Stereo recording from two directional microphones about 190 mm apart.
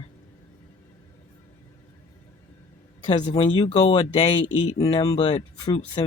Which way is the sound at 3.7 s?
25° left (ahead or behind).